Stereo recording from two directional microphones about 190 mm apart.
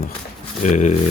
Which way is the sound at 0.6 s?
40° left (ahead or behind).